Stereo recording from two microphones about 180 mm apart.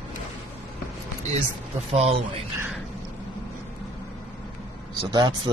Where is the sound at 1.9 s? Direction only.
35° right (ahead or behind).